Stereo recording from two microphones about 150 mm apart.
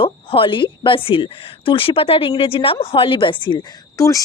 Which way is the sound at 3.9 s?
20° left (ahead or behind).